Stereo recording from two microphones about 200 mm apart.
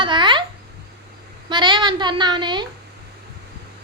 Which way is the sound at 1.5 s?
25° right (ahead or behind).